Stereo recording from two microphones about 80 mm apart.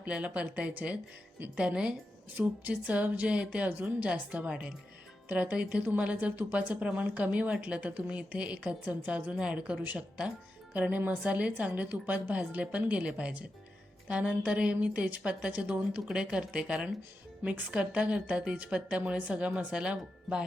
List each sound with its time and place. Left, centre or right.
0.0 s a woman's voice: centre